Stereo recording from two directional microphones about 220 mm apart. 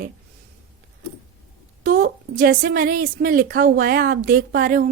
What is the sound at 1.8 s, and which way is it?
A woman's voice, 40° right (ahead or behind).